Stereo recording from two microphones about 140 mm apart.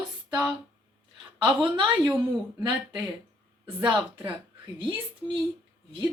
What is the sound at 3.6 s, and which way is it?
Speech, 35° right (ahead or behind).